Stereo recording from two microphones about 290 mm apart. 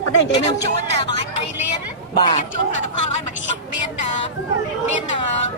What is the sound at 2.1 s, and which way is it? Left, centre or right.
Speech, centre.